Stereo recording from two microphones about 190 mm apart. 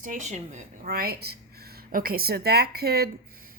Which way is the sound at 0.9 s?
55° right (ahead or behind).